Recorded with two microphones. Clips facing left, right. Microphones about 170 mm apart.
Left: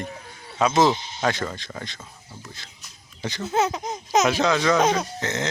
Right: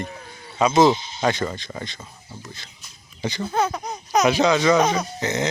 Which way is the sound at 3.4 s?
20° left (ahead or behind).